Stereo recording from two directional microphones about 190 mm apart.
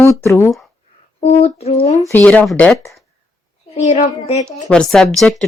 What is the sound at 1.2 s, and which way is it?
Speech, 30° left (ahead or behind).